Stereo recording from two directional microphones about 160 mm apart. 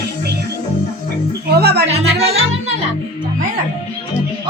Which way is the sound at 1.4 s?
80° right.